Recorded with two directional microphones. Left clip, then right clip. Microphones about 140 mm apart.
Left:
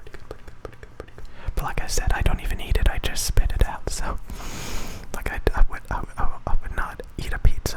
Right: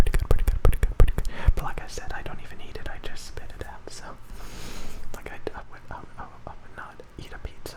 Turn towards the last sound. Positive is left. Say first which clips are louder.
# left 9 dB
turn(degrees=35)  # may be behind; listen again after turning